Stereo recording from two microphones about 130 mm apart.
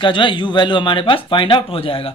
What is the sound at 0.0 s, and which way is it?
Speech, 40° left (ahead or behind).